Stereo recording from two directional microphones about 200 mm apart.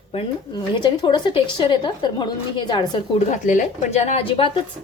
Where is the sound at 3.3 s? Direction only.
40° left (ahead or behind).